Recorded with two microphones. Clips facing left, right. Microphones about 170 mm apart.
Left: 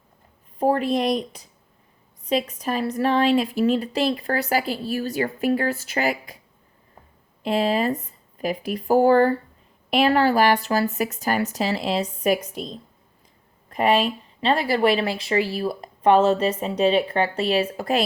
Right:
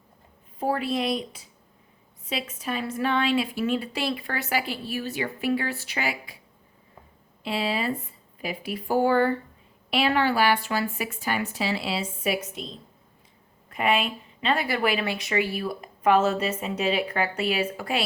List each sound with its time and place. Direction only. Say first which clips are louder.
0.6 s speech: left 5 dB; 40° left (ahead or behind)
2.2 s a woman's voice: left 8 dB; 40° left (ahead or behind)
7.4 s a woman's voice: left 6 dB; 45° left (ahead or behind)
13.7 s a woman's voice: left 5 dB; 35° left (ahead or behind)